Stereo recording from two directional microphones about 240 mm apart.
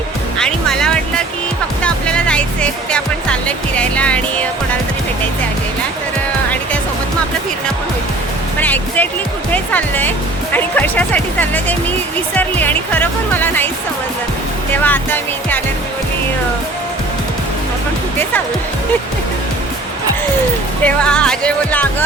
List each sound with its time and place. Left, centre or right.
0.3 s music: centre
1.8 s speech: centre
8.5 s speech: centre
14.7 s speech: centre
20.8 s speech: centre